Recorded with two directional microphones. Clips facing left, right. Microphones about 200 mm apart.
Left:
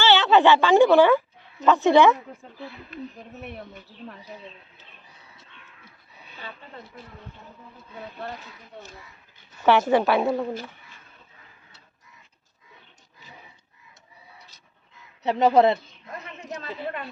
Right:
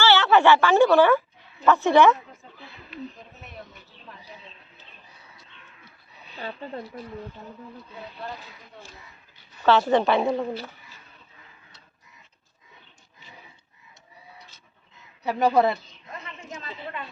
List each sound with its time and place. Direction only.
0.0 s a woman's voice: 15° left (ahead or behind)
9.6 s a woman's voice: 15° left (ahead or behind)
15.2 s speech: 20° left (ahead or behind)
16.6 s a woman's voice: 55° left (ahead or behind)